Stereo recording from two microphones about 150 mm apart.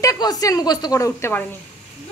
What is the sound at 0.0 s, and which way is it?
A woman's voice, 25° left (ahead or behind).